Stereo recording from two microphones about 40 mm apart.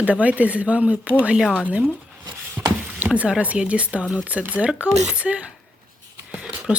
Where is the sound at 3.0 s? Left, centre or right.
Right.